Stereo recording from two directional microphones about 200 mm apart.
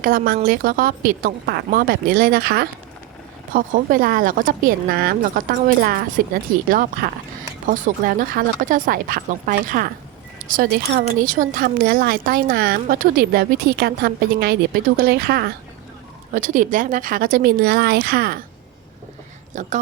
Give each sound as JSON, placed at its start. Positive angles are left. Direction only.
{"t": 0.0, "sound": "a woman's voice", "side_deg": -45}
{"t": 16.3, "sound": "a woman's voice", "side_deg": -40}
{"t": 19.5, "sound": "speech", "side_deg": -40}